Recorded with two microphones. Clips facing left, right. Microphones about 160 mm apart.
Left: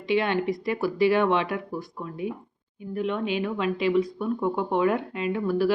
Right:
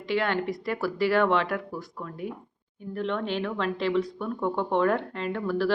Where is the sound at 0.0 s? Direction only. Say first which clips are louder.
Left 3 dB; 20° left (ahead or behind).